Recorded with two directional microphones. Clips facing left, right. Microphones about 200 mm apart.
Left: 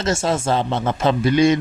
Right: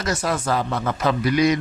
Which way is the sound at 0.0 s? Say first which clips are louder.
Left 4 dB; 25° left (ahead or behind).